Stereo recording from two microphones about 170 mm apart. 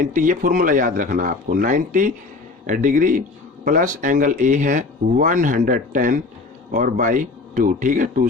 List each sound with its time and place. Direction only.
0.0 s speech: 50° right (ahead or behind)